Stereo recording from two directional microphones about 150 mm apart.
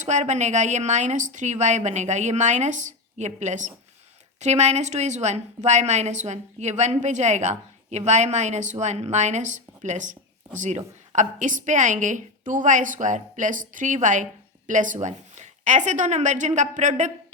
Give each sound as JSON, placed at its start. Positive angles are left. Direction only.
{"t": 0.0, "sound": "a woman's voice", "side_deg": -50}